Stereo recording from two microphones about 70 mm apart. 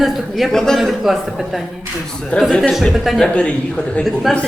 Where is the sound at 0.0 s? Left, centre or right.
Centre.